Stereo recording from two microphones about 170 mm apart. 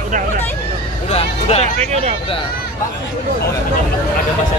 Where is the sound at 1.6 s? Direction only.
40° right (ahead or behind).